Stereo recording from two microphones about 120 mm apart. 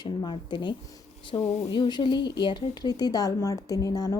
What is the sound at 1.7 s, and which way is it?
Speech, 40° left (ahead or behind).